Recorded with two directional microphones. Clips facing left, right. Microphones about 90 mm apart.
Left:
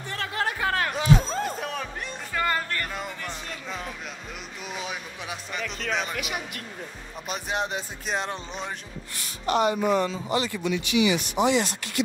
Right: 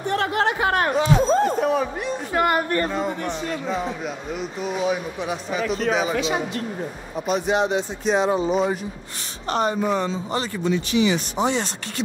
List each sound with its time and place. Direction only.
0.0 s chatter: 55° right (ahead or behind)
0.4 s chatter: 25° right (ahead or behind)
1.2 s a sound: 40° right (ahead or behind)
1.6 s a sound: 5° right (ahead or behind)
2.3 s speech: 25° right (ahead or behind)
4.7 s speech: centre (ahead or behind)
6.1 s speech: 30° right (ahead or behind)
7.2 s speech: centre (ahead or behind)
9.5 s speech: 35° right (ahead or behind)